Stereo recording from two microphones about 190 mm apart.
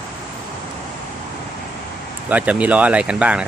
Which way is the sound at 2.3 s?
5° right (ahead or behind).